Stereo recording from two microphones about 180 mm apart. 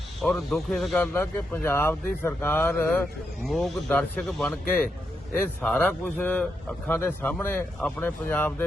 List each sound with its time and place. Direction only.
0.2 s a man's voice: centre (ahead or behind)
5.6 s a man's voice: 5° left (ahead or behind)